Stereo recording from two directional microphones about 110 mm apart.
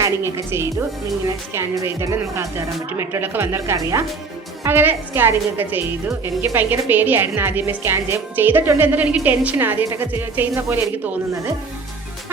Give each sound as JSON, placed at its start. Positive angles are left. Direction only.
{"t": 0.0, "sound": "a woman's voice", "side_deg": -25}
{"t": 4.6, "sound": "a woman's voice", "side_deg": -20}